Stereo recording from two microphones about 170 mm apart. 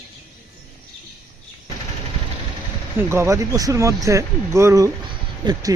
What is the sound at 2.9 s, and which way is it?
Speech, 15° right (ahead or behind).